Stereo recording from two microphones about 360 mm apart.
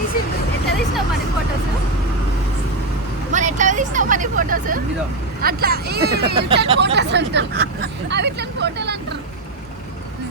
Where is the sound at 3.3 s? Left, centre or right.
Centre.